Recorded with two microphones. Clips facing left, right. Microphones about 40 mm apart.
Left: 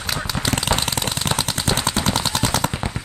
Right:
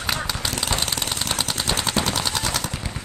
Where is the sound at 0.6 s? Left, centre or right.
Left.